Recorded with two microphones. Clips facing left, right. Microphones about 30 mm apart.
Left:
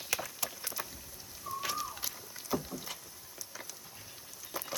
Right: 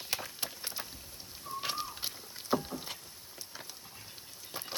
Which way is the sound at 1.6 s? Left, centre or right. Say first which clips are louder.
Even; right.